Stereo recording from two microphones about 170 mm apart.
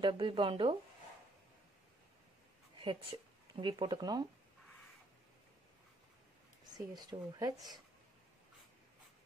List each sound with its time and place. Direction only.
0.0 s speech: 30° right (ahead or behind)
2.8 s speech: 30° right (ahead or behind)
6.9 s speech: 25° right (ahead or behind)